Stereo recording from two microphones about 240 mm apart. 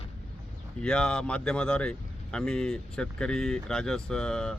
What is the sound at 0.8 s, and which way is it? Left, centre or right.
Speech, centre.